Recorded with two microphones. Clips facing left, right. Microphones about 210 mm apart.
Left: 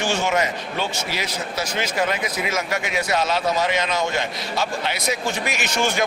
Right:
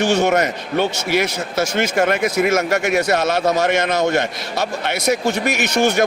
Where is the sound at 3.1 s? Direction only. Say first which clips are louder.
Right 4 dB; 70° right (ahead or behind).